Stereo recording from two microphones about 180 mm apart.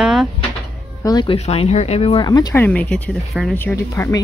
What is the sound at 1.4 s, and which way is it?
Speech, 35° left (ahead or behind).